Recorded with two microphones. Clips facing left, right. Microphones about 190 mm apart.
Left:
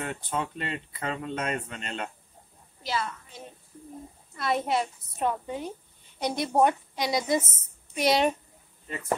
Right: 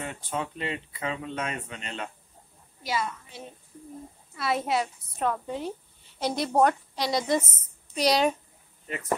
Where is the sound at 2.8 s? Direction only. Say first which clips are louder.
Right 1 dB; 10° right (ahead or behind); by 6.7 s 5° left (ahead or behind).